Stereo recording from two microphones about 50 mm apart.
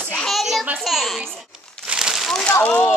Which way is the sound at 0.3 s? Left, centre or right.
Centre.